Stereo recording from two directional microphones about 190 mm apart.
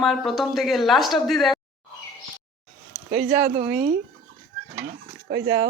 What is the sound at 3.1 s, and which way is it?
Speech, 55° right (ahead or behind).